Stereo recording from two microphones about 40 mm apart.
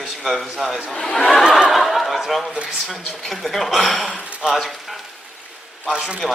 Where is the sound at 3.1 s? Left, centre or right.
Centre.